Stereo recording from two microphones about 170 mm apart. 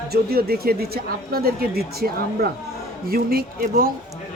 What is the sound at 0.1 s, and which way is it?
A man's voice, 65° right (ahead or behind).